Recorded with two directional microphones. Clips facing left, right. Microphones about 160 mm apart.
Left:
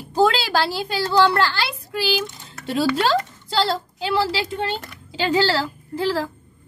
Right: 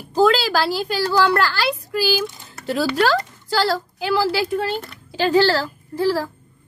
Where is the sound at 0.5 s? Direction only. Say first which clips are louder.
Right 2 dB; 25° left (ahead or behind).